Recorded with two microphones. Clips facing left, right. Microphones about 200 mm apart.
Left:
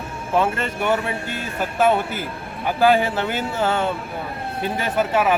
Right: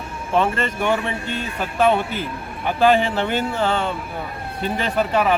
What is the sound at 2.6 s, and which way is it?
Speech, 5° left (ahead or behind).